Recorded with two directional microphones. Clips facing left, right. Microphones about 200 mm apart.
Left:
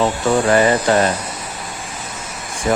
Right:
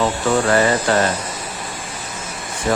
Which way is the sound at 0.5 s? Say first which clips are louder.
Left 2 dB; 15° left (ahead or behind).